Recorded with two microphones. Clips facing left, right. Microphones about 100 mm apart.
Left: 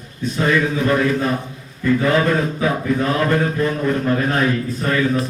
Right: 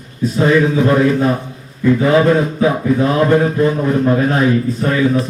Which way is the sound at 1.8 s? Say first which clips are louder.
Right 5 dB; 15° right (ahead or behind).